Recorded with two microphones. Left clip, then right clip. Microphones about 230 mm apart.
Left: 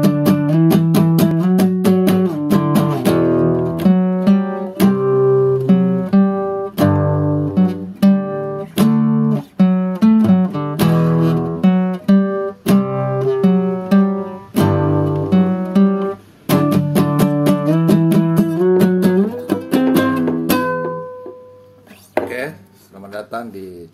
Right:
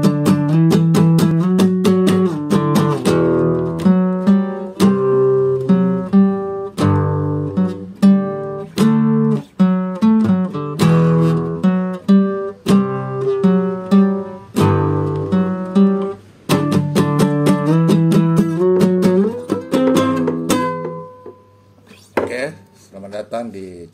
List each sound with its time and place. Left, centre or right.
0.0 s music: left